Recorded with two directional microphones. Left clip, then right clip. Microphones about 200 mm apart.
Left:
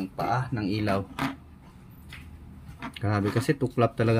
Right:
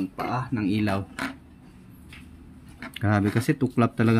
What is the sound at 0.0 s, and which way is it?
Speech, 30° right (ahead or behind).